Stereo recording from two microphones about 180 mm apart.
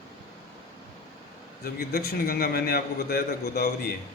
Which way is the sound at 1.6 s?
55° left (ahead or behind).